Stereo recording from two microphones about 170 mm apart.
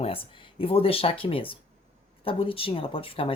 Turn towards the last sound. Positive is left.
turn(degrees=30)  # may be behind; listen again after turning